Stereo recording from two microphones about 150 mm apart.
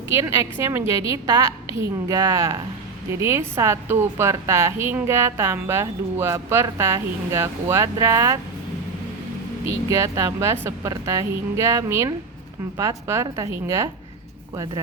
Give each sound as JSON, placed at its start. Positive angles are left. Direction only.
{"t": 0.1, "sound": "a woman's voice", "side_deg": -20}
{"t": 9.9, "sound": "a woman's voice", "side_deg": -20}